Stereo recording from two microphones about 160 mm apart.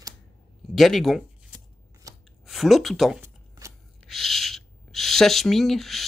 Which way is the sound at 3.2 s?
20° right (ahead or behind).